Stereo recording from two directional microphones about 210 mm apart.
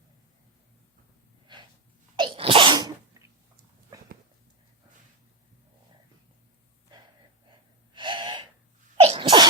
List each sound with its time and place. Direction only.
2.1 s sneeze: 25° right (ahead or behind)
7.9 s gasp: 20° right (ahead or behind)
9.0 s sneeze: 25° right (ahead or behind)